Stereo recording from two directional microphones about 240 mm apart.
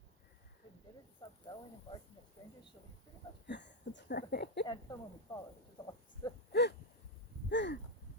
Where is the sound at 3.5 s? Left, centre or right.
Left.